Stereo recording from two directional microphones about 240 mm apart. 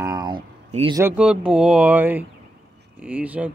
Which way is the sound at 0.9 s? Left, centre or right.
Centre.